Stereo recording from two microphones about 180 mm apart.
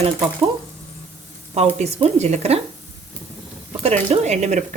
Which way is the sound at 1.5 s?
35° right (ahead or behind).